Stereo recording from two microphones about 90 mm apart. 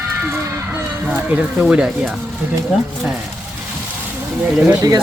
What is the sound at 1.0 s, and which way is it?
Speech, 20° right (ahead or behind).